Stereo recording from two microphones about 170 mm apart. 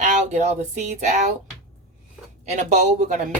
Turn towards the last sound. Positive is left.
turn(degrees=-45)  # may be behind; listen again after turning